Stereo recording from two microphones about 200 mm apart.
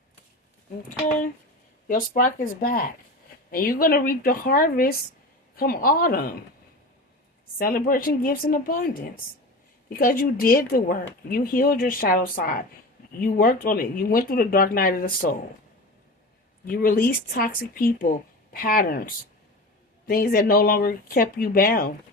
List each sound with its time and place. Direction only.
1.9 s speech: 45° left (ahead or behind)
7.6 s speech: 45° left (ahead or behind)
16.6 s speech: 45° left (ahead or behind)